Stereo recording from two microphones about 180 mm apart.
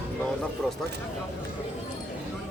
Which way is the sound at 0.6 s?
5° left (ahead or behind).